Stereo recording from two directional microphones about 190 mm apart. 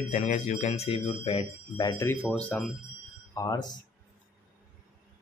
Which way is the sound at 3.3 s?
20° left (ahead or behind).